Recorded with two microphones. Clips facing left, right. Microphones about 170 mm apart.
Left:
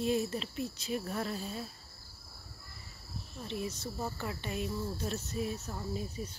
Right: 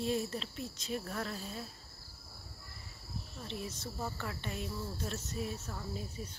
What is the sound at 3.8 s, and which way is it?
Speech, 10° left (ahead or behind).